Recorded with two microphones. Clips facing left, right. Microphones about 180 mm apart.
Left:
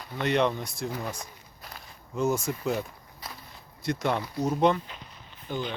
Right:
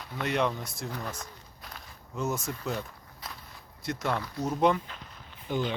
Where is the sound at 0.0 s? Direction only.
5° right (ahead or behind).